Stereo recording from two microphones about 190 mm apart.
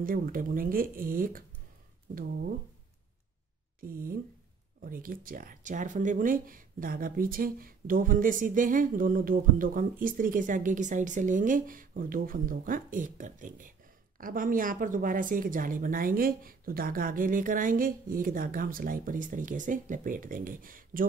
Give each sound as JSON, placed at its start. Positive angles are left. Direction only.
{"t": 0.0, "sound": "speech", "side_deg": -45}
{"t": 3.8, "sound": "speech", "side_deg": -50}